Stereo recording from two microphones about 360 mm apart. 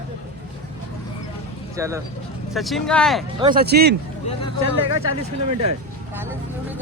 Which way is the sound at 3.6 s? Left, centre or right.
Right.